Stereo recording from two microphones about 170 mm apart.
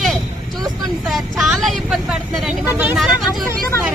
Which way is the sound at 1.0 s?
Centre (ahead or behind).